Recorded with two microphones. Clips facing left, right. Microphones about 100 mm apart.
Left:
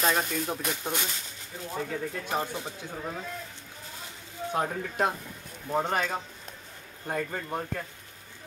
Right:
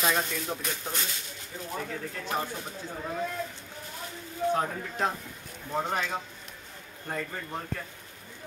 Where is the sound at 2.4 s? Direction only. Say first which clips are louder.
Left 2 dB; 20° left (ahead or behind).